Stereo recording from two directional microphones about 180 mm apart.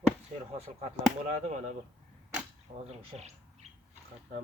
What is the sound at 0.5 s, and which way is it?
Speech, 35° right (ahead or behind).